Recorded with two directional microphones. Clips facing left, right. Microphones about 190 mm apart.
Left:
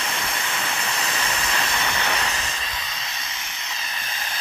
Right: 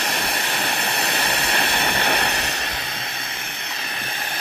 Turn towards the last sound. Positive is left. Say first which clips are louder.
# right 3 dB
turn(degrees=-60)  # may be behind; listen again after turning